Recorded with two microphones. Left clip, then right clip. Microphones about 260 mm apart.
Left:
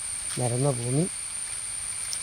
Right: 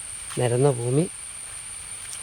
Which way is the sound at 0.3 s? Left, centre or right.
Right.